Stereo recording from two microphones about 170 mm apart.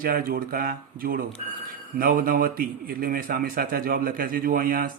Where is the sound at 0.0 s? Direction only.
60° right (ahead or behind).